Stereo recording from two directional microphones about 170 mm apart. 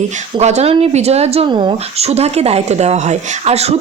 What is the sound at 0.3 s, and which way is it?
Speech, 40° right (ahead or behind).